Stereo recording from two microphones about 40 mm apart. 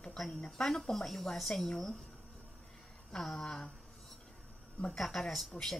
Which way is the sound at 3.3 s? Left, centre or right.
Centre.